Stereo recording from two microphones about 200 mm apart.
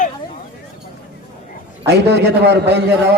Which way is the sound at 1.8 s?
55° right (ahead or behind).